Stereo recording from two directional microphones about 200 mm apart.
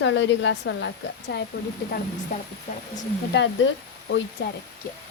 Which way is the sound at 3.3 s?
65° left (ahead or behind).